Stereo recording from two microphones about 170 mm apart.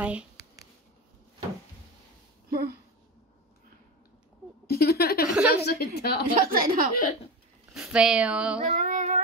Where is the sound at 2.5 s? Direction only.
65° right (ahead or behind).